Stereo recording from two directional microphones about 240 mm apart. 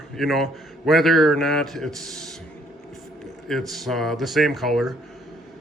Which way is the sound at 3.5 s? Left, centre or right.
Centre.